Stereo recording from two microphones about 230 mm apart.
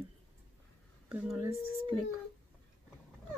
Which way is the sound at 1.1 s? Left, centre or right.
Centre.